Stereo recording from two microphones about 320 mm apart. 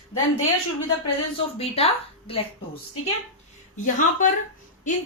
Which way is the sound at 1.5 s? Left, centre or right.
Centre.